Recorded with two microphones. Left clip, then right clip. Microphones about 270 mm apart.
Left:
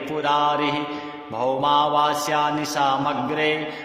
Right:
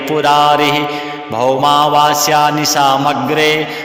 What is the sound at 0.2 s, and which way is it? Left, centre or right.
Mantra, right.